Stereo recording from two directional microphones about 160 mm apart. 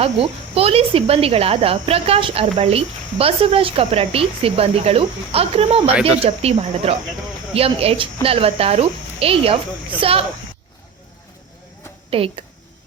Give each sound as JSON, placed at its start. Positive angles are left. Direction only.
{"t": 0.0, "sound": "speech", "side_deg": -35}
{"t": 12.1, "sound": "speech", "side_deg": -35}